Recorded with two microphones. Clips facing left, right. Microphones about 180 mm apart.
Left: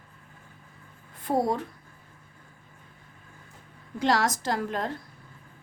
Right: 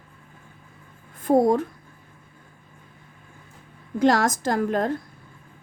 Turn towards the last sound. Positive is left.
turn(degrees=-50)  # may be behind; listen again after turning